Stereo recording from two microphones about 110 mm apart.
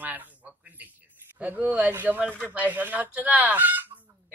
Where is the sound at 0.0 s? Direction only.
15° right (ahead or behind).